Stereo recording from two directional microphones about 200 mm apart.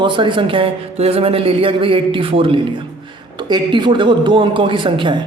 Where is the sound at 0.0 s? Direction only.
25° right (ahead or behind).